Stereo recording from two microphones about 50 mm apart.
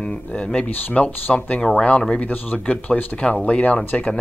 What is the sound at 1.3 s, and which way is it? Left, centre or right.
Speech, centre.